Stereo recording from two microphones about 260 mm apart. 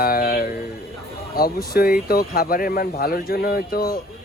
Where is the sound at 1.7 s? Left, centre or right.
Left.